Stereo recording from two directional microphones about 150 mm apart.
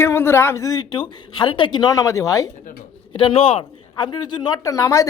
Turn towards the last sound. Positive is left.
turn(degrees=20)  # may be behind; listen again after turning